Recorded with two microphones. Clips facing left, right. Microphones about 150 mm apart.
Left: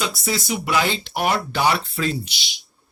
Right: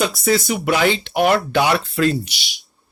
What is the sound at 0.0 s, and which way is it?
Speech, 50° right (ahead or behind).